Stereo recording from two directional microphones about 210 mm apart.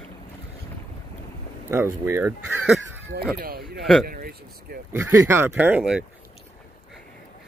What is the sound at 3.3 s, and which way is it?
Speech, 45° right (ahead or behind).